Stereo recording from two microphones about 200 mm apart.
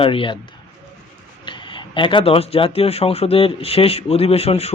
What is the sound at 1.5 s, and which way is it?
Speech, 25° left (ahead or behind).